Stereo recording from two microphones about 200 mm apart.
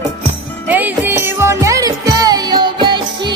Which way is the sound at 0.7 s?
10° right (ahead or behind).